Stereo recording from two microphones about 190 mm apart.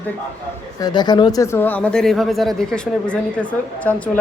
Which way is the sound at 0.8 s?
20° left (ahead or behind).